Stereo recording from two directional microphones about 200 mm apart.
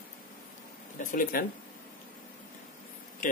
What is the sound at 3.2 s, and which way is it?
Speech, 40° left (ahead or behind).